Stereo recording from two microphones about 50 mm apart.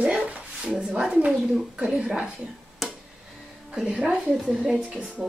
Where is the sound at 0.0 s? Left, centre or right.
Right.